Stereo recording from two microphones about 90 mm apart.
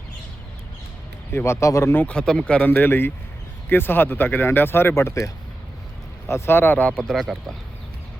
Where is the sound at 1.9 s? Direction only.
15° left (ahead or behind).